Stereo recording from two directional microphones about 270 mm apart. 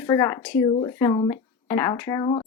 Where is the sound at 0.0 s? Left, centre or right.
Centre.